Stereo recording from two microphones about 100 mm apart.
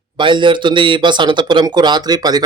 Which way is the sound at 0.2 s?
55° right (ahead or behind).